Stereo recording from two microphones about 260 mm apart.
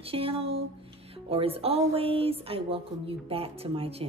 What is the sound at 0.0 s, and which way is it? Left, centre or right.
A woman's voice, right.